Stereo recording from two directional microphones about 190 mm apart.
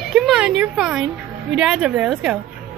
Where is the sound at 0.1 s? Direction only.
Centre (ahead or behind).